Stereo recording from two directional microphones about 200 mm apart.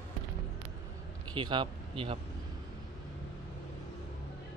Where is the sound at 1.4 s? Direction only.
25° right (ahead or behind).